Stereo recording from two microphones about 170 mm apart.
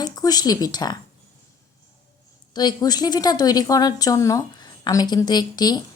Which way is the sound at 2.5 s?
25° left (ahead or behind).